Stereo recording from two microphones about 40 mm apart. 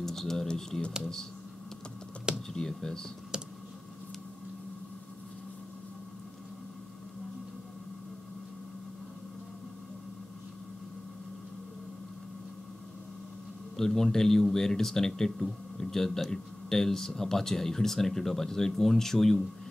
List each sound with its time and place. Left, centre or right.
0.0 s a sound: centre
0.5 s speech: centre
2.5 s speech: centre
13.7 s speech: centre